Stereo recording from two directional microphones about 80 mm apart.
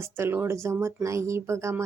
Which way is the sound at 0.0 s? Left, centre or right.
Right.